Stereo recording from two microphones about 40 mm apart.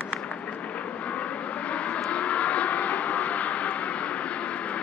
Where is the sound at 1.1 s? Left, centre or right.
Left.